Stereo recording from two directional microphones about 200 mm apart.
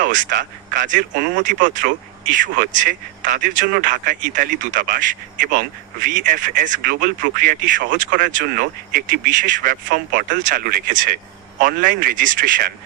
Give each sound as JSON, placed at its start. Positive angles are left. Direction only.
{"t": 0.0, "sound": "speech", "side_deg": -40}